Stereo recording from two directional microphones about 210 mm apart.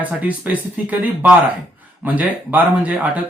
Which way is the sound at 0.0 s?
5° right (ahead or behind).